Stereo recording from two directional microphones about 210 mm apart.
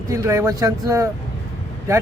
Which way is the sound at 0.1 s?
15° right (ahead or behind).